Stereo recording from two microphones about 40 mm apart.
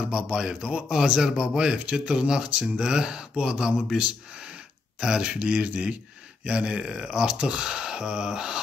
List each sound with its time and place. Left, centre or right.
0.1 s speech: right
5.0 s speech: centre
5.4 s speech: right; by 8.5 s centre